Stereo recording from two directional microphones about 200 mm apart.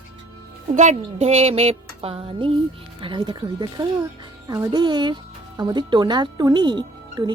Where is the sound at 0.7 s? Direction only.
35° right (ahead or behind).